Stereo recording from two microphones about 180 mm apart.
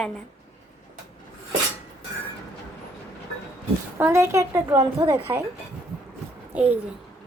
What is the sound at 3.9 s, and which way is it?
A woman's voice, 15° right (ahead or behind).